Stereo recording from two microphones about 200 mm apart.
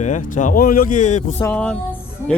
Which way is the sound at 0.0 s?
40° left (ahead or behind).